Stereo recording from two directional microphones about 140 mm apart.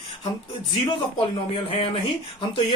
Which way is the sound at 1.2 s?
40° left (ahead or behind).